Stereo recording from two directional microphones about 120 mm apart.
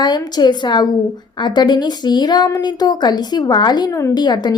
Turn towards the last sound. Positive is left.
turn(degrees=35)  # may be behind; listen again after turning